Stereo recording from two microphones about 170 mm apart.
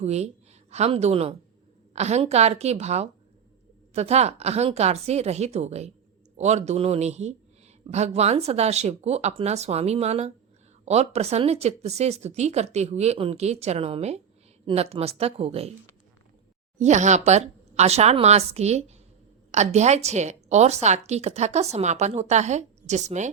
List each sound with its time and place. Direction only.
0.0 s a woman's voice: 40° right (ahead or behind)
16.7 s a woman's voice: 45° right (ahead or behind)